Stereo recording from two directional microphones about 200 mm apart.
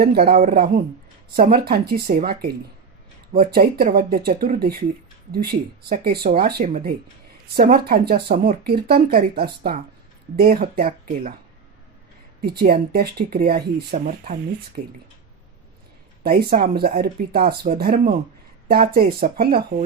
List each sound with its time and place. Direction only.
0.0 s speech: 50° right (ahead or behind)
12.5 s speech: 50° right (ahead or behind)
16.2 s speech: 45° right (ahead or behind)